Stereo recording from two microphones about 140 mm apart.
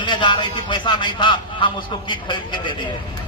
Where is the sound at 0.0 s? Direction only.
35° left (ahead or behind).